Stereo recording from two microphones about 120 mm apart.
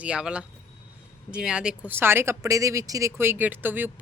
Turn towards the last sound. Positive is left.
turn(degrees=-15)  # may be behind; listen again after turning